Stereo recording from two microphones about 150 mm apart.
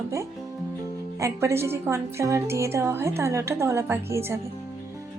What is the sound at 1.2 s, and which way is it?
A woman's voice, 20° right (ahead or behind).